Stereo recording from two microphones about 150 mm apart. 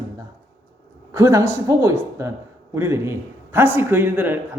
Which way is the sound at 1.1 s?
20° right (ahead or behind).